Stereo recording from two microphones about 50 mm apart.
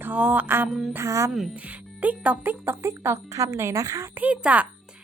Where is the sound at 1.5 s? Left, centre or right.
Right.